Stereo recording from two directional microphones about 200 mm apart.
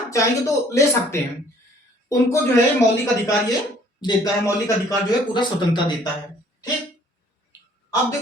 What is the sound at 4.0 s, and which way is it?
A man's voice, 20° left (ahead or behind).